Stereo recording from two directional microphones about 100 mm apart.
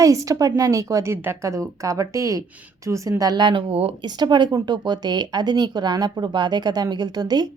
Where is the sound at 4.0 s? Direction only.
45° right (ahead or behind).